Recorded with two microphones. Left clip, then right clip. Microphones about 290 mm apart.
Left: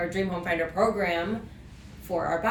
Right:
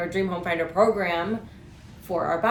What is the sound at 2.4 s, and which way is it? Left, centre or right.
Speech, centre.